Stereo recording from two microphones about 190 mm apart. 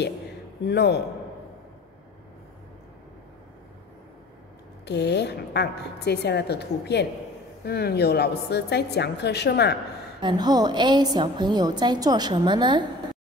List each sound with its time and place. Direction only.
0.7 s a woman's voice: 60° left (ahead or behind)
4.8 s a woman's voice: 65° left (ahead or behind)
10.2 s a woman's voice: 20° right (ahead or behind)